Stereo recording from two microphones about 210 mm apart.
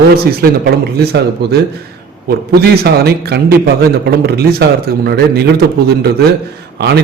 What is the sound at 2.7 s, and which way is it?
A man's voice, 50° right (ahead or behind).